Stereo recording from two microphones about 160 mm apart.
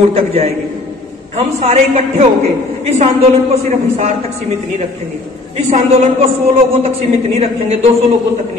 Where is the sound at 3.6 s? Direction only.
45° right (ahead or behind).